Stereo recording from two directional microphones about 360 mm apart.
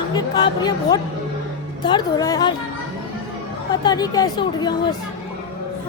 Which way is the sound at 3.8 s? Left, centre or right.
Centre.